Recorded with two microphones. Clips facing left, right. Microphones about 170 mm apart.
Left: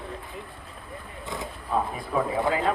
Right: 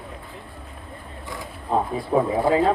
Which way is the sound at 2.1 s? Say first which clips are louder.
Right 6 dB; 35° right (ahead or behind).